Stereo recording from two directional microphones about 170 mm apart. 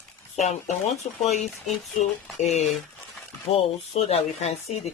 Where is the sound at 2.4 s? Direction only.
40° left (ahead or behind).